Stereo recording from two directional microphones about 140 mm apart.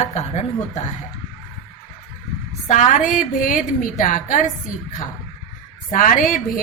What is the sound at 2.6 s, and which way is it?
A woman's voice, 60° left (ahead or behind).